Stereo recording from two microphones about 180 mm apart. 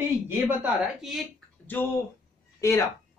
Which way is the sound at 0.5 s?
5° right (ahead or behind).